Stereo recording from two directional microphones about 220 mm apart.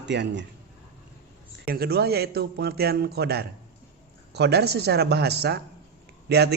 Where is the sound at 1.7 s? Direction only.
45° right (ahead or behind).